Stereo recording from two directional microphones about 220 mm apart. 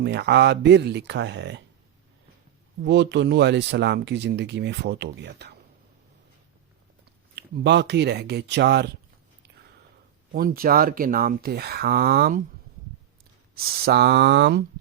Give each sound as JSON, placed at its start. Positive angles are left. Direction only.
{"t": 0.0, "sound": "speech", "side_deg": -50}
{"t": 2.8, "sound": "speech", "side_deg": -50}
{"t": 7.3, "sound": "speech", "side_deg": -50}
{"t": 10.3, "sound": "speech", "side_deg": -45}
{"t": 13.6, "sound": "speech", "side_deg": -45}